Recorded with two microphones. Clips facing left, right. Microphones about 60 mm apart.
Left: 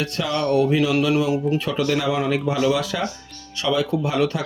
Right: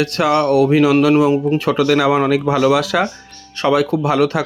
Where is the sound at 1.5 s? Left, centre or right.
Right.